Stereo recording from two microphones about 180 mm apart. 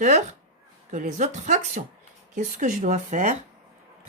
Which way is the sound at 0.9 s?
40° right (ahead or behind).